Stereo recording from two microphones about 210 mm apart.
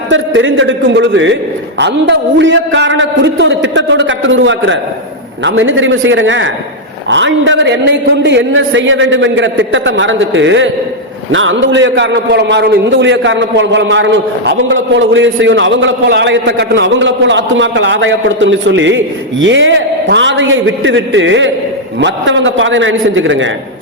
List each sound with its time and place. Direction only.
0.1 s a man's voice: 65° right (ahead or behind)